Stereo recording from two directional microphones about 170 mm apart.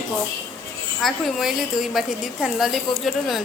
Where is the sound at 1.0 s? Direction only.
Centre (ahead or behind).